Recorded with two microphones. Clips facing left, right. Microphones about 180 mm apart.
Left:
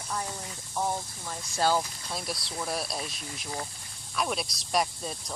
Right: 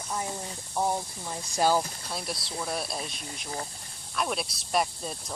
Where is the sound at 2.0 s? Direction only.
Centre (ahead or behind).